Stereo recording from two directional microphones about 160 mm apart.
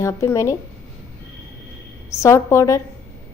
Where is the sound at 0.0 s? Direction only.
20° left (ahead or behind).